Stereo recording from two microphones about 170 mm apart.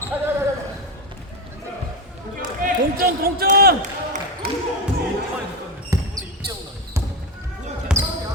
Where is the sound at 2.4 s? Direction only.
55° right (ahead or behind).